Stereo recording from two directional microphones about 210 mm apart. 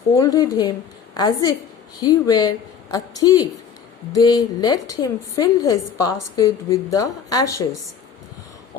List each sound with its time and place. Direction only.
0.2 s a woman's voice: 15° left (ahead or behind)